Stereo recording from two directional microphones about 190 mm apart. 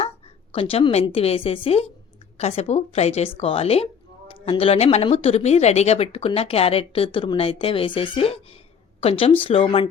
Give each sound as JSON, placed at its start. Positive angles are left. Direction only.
{"t": 0.5, "sound": "speech", "side_deg": 30}